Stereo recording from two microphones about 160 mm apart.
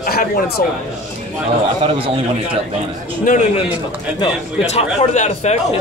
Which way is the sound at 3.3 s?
60° left (ahead or behind).